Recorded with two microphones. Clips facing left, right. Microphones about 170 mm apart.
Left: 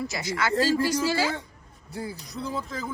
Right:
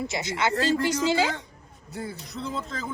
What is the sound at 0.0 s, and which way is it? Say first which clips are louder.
A woman's voice: right 1 dB; 25° right (ahead or behind).